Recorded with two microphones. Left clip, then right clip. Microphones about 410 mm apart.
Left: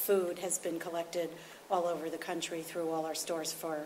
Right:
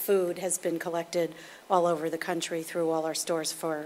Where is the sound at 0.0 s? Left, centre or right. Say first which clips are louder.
Right 5 dB; right.